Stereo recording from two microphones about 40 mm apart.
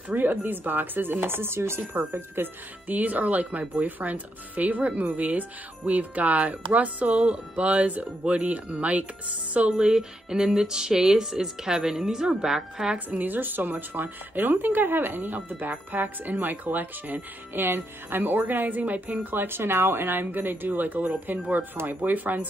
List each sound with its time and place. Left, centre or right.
0.1 s speech: right
2.0 s speech: right
9.7 s music: centre
12.9 s speech: right
17.6 s speech: right